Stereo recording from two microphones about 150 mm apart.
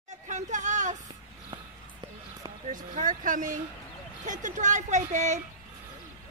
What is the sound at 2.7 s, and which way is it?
Speech, 60° right (ahead or behind).